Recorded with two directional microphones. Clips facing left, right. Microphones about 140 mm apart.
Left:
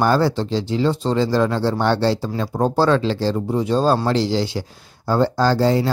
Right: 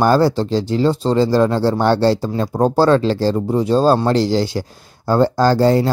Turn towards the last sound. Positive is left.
turn(degrees=-45)  # may be behind; listen again after turning